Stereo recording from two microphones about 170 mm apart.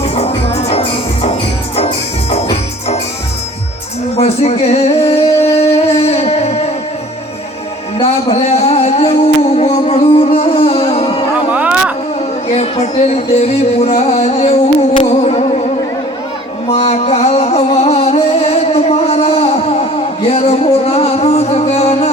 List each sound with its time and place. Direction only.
0.0 s music: 35° left (ahead or behind)
2.3 s music: 35° left (ahead or behind)
4.2 s music: 40° left (ahead or behind)
7.9 s music: 40° left (ahead or behind)
11.5 s a sound: 10° right (ahead or behind)
12.5 s music: 40° left (ahead or behind)
16.6 s music: 40° left (ahead or behind)